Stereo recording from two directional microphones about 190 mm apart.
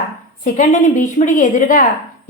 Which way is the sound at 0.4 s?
40° left (ahead or behind).